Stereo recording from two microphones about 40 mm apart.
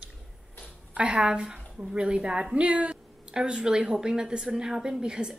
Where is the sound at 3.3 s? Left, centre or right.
Centre.